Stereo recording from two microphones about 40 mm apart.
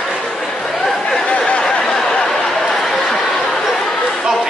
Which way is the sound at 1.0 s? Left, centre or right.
Left.